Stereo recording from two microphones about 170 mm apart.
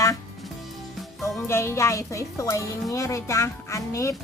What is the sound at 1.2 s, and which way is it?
Music, 15° left (ahead or behind).